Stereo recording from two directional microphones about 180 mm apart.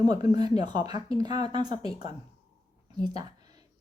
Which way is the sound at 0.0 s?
20° right (ahead or behind).